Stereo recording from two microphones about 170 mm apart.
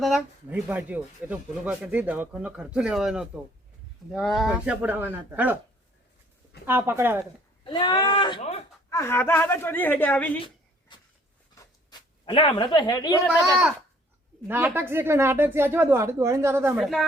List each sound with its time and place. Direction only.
0.0 s speech: centre (ahead or behind)
6.7 s speech: 15° right (ahead or behind)
7.6 s speech: 25° left (ahead or behind)
8.9 s speech: 15° left (ahead or behind)
10.4 s writing: 25° left (ahead or behind)
11.6 s a sound: 25° left (ahead or behind)
14.4 s speech: 10° right (ahead or behind)
16.8 s a woman's voice: centre (ahead or behind)